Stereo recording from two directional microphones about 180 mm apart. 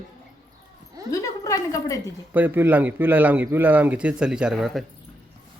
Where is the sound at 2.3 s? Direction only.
10° right (ahead or behind).